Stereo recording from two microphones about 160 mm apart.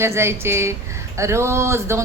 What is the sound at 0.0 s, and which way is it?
Speech, 15° right (ahead or behind).